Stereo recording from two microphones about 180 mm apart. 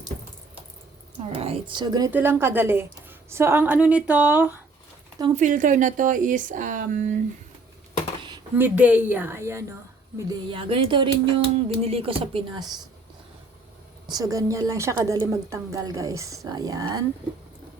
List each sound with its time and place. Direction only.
1.3 s a woman's voice: 35° right (ahead or behind)
2.0 s a woman's voice: 10° right (ahead or behind)
5.2 s speech: 40° right (ahead or behind)
8.5 s a woman's voice: 10° right (ahead or behind)
14.1 s a woman's voice: 20° right (ahead or behind)